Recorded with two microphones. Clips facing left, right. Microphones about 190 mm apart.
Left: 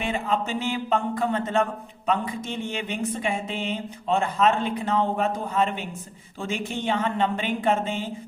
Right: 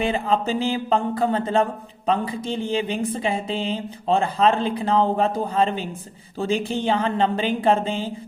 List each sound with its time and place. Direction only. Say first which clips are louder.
0.0 s speech: right 4 dB; 35° right (ahead or behind)